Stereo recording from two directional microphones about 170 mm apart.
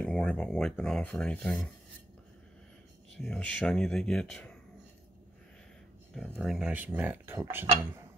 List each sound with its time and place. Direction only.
0.0 s speech: 5° left (ahead or behind)
3.2 s speech: 5° left (ahead or behind)
6.1 s speech: centre (ahead or behind); by 7.6 s 15° right (ahead or behind)